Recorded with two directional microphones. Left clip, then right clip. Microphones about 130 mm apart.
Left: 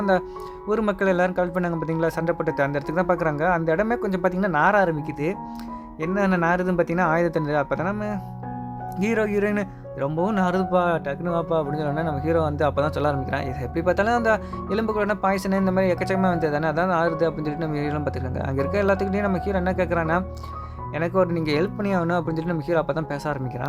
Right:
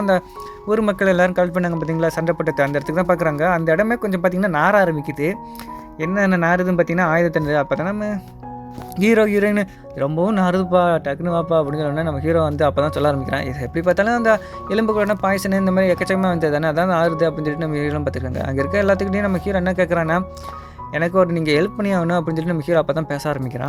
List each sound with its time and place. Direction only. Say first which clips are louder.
0.7 s speech: right 5 dB; 25° right (ahead or behind)
9.0 s speech: right 7 dB; 35° right (ahead or behind)